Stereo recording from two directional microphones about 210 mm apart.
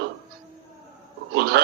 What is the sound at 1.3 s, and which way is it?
Speech, 50° right (ahead or behind).